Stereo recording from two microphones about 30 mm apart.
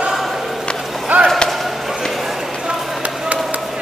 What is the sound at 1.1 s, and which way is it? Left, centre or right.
Chop, right.